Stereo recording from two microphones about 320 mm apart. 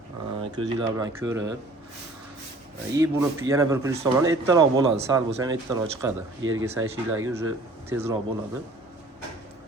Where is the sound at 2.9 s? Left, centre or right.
Centre.